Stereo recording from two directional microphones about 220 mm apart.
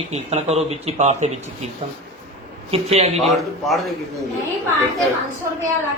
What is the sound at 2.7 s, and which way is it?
Speech, 30° right (ahead or behind).